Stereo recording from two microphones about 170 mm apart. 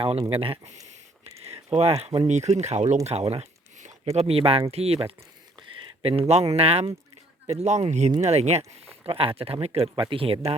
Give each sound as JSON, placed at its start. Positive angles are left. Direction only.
{"t": 0.0, "sound": "speech", "side_deg": -35}